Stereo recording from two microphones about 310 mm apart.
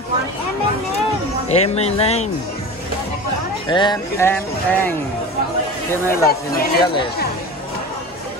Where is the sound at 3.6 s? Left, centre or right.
Centre.